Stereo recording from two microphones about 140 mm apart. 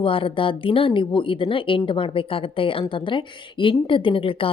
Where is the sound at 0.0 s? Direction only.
40° left (ahead or behind).